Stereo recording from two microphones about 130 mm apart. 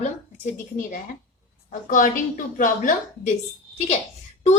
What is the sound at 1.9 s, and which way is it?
A woman's voice, 90° left.